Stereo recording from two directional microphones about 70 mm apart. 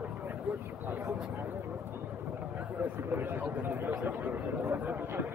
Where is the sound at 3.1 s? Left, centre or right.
Right.